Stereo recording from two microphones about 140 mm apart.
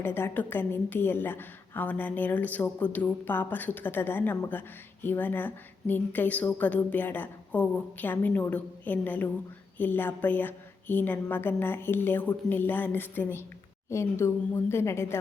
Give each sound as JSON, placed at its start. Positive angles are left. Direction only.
{"t": 0.0, "sound": "a woman's voice", "side_deg": 15}